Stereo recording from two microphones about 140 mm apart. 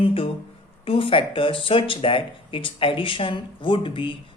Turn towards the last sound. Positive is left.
turn(degrees=35)  # may be behind; listen again after turning